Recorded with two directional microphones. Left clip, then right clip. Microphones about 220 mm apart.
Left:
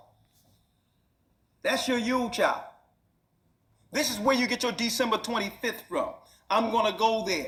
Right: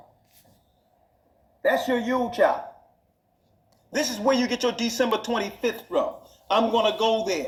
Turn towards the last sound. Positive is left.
turn(degrees=15)  # may be behind; listen again after turning